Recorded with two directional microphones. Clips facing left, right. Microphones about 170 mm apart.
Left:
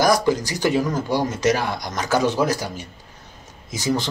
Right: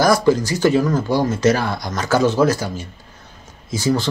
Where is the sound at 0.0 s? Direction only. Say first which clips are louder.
Right 3 dB; 15° left (ahead or behind).